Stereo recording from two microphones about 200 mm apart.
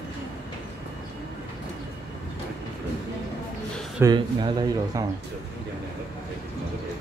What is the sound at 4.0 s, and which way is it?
Speech, 20° right (ahead or behind).